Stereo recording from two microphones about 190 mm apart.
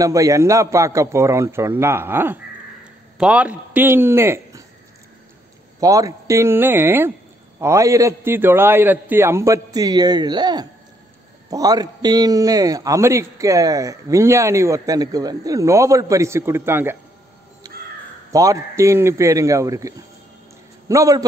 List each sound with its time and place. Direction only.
0.0 s a man's voice: 15° right (ahead or behind)
5.8 s a man's voice: 20° right (ahead or behind)
18.3 s a man's voice: 15° right (ahead or behind)